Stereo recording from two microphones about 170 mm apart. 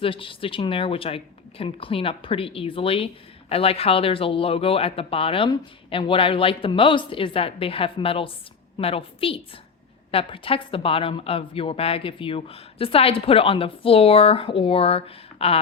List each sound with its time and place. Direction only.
0.0 s speech: 30° left (ahead or behind)